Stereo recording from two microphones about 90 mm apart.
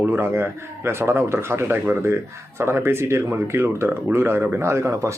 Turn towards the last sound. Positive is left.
turn(degrees=-35)  # may be behind; listen again after turning